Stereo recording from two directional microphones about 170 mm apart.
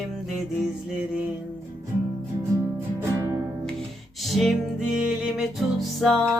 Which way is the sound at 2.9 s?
15° right (ahead or behind).